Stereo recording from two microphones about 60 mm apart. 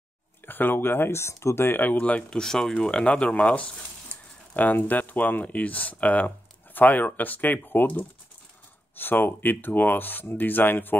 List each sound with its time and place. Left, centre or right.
0.5 s speech: left
1.8 s speech: left